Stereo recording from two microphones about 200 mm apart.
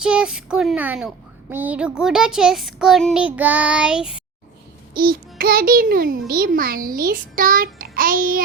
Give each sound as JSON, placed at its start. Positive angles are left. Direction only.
{"t": 0.0, "sound": "a child's voice", "side_deg": -5}
{"t": 4.9, "sound": "a child's voice", "side_deg": -50}